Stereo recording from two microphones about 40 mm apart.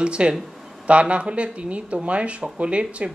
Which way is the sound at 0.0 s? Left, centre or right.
Right.